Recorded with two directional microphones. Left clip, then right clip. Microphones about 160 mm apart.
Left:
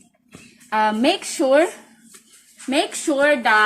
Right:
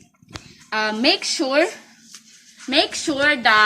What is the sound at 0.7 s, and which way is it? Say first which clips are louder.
Speech: left 1 dB; 35° left (ahead or behind).